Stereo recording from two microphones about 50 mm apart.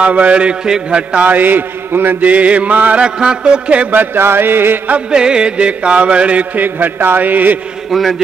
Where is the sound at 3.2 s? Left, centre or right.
Centre.